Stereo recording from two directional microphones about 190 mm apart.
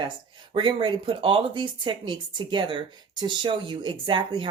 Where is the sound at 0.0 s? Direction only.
25° right (ahead or behind).